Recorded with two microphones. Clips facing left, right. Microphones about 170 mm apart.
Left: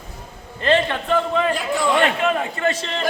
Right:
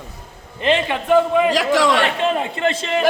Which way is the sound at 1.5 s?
90° right.